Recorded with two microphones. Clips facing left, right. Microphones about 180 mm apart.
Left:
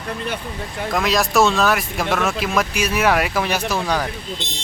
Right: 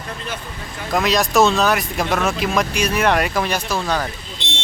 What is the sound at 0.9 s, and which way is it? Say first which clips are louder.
Speech: right 2 dB; centre (ahead or behind).